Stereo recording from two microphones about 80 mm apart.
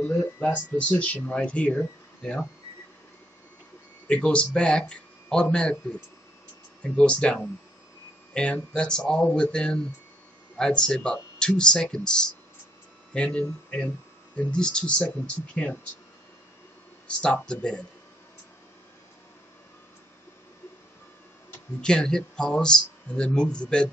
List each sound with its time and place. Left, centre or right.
0.7 s speech: centre
4.1 s speech: centre
17.2 s speech: centre
21.8 s speech: centre